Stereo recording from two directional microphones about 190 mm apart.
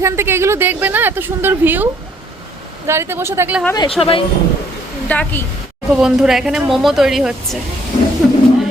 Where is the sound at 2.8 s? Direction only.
15° right (ahead or behind).